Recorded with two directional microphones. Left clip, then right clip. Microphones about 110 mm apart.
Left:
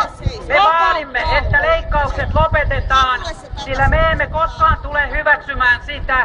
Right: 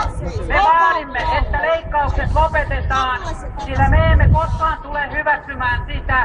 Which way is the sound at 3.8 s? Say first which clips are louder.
Left 2 dB; 35° left (ahead or behind).